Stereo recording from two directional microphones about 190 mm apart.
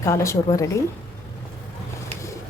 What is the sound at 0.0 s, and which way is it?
Speech, 15° left (ahead or behind).